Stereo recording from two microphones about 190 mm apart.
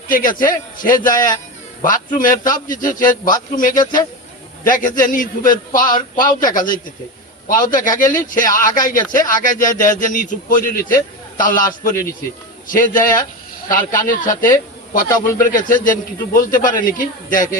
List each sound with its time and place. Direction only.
0.1 s speech: 45° left (ahead or behind)